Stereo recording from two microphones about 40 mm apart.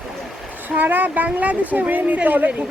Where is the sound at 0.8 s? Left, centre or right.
Right.